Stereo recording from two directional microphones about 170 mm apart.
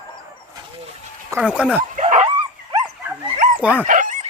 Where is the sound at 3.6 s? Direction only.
10° right (ahead or behind).